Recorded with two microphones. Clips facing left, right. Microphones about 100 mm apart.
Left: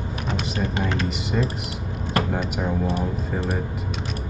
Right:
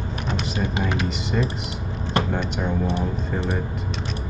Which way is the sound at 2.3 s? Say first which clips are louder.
Even; 5° left (ahead or behind).